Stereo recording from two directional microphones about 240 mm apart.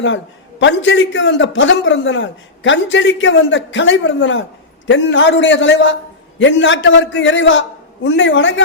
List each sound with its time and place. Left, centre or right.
0.6 s a man's voice: left